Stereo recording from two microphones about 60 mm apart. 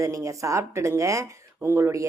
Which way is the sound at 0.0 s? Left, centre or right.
Right.